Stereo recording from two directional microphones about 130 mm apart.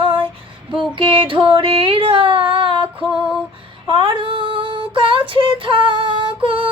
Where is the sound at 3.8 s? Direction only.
40° right (ahead or behind).